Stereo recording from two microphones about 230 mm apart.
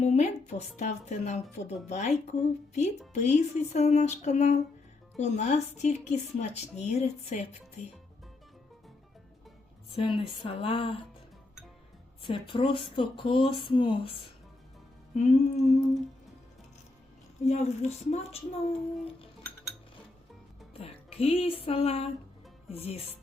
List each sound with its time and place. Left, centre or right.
0.0 s speech: left
9.9 s speech: left
12.2 s speech: left
15.1 s speech: left
17.4 s speech: left
20.7 s music: left
22.7 s speech: left